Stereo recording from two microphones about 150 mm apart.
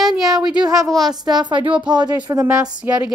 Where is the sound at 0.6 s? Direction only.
25° right (ahead or behind).